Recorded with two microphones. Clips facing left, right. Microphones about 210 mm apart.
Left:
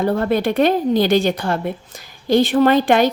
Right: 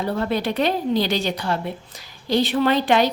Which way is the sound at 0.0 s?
50° left (ahead or behind).